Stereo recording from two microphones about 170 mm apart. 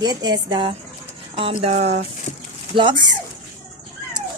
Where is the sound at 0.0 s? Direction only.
25° right (ahead or behind).